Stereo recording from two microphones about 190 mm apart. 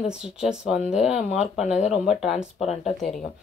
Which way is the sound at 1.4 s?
35° left (ahead or behind).